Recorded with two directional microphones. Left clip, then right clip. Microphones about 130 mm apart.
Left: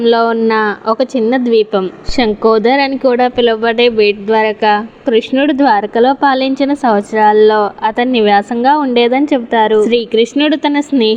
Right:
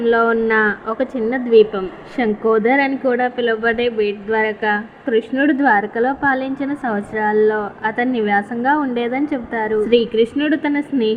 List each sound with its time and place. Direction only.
0.0 s a woman's voice: 55° left (ahead or behind)